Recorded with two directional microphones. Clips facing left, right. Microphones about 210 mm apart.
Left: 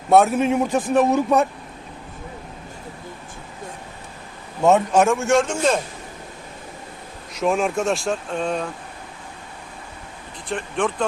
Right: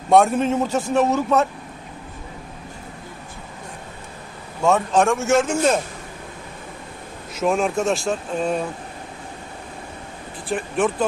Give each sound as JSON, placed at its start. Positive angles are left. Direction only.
{"t": 0.1, "sound": "a man's voice", "side_deg": 5}
{"t": 4.6, "sound": "a man's voice", "side_deg": 15}
{"t": 5.0, "sound": "speech", "side_deg": 0}
{"t": 7.3, "sound": "speech", "side_deg": 0}
{"t": 10.5, "sound": "speech", "side_deg": -5}